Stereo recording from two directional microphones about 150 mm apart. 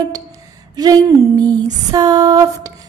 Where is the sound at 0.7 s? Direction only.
25° right (ahead or behind).